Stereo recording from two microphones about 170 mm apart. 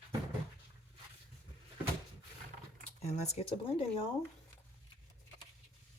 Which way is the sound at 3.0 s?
40° left (ahead or behind).